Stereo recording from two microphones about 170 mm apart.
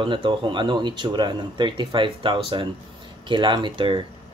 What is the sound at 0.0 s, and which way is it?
Speech, 30° right (ahead or behind).